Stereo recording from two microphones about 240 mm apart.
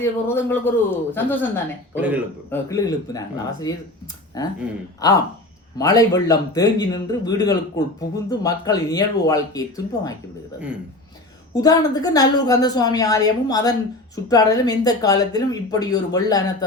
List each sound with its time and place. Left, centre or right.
0.0 s speech: centre
2.0 s a man's voice: centre
2.5 s speech: centre
11.5 s speech: centre